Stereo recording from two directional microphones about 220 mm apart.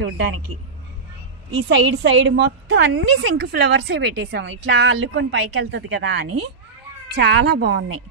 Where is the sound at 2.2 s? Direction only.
55° right (ahead or behind).